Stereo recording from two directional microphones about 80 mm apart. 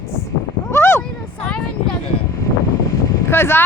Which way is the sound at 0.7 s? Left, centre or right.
Left.